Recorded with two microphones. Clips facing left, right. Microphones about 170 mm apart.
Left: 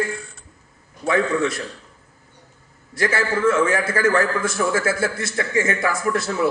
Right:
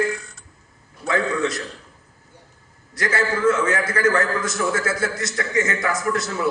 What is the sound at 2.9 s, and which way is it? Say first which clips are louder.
A man's voice: left 1 dB; 25° left (ahead or behind).